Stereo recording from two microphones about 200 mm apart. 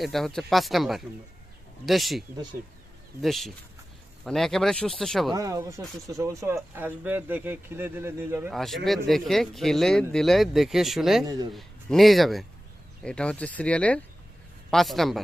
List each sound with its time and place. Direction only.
0.0 s speech: centre (ahead or behind)
5.3 s speech: 15° right (ahead or behind)
8.5 s speech: centre (ahead or behind)